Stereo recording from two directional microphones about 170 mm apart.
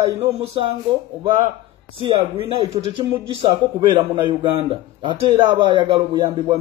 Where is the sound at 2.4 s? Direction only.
30° right (ahead or behind).